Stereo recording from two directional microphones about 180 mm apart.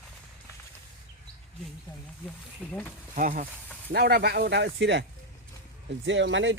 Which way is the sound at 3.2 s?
45° right (ahead or behind).